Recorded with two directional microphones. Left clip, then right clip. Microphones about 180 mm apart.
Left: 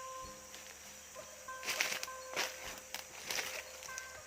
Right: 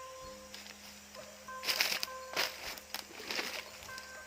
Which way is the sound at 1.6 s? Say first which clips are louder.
Right 4 dB; 60° right (ahead or behind).